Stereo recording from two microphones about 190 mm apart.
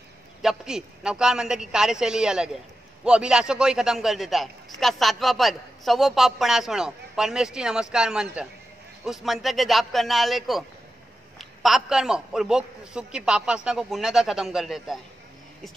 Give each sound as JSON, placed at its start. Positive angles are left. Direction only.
{"t": 0.4, "sound": "a man's voice", "side_deg": 0}